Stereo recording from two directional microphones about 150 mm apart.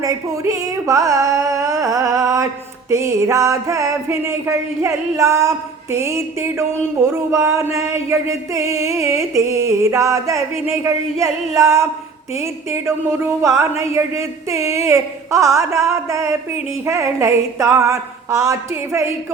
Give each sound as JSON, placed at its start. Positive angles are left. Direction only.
{"t": 0.0, "sound": "carnatic music", "side_deg": -20}
{"t": 2.9, "sound": "music", "side_deg": -20}